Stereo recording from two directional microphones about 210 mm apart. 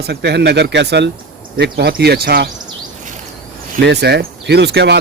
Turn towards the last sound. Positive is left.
turn(degrees=-50)  # may be behind; listen again after turning